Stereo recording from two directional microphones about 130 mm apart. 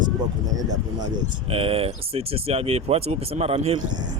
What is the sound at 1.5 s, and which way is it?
Speech, 50° right (ahead or behind).